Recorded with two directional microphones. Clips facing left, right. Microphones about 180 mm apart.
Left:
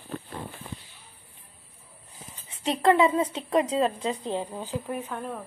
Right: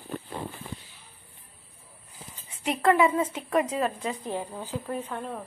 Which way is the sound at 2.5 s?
25° left (ahead or behind).